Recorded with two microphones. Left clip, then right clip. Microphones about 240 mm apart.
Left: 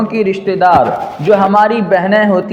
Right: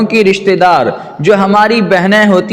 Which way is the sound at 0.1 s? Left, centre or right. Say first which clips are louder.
Right 6 dB; right.